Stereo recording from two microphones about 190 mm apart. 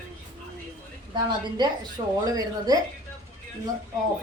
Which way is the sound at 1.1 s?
25° right (ahead or behind).